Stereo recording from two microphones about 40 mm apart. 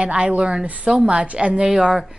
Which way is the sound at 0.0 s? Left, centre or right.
Right.